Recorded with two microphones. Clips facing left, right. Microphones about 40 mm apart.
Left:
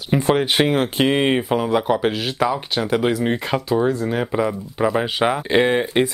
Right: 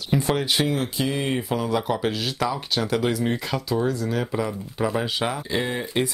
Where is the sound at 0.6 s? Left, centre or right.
Left.